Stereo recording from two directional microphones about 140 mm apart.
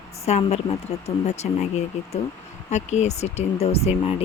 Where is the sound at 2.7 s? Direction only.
55° left (ahead or behind).